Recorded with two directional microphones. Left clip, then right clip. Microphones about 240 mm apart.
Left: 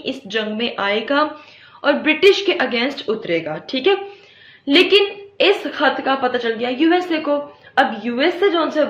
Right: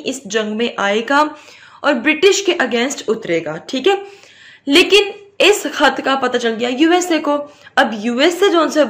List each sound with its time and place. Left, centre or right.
0.0 s a woman's voice: right